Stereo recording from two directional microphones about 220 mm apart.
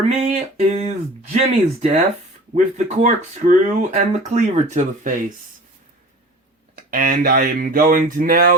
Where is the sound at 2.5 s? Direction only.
35° right (ahead or behind).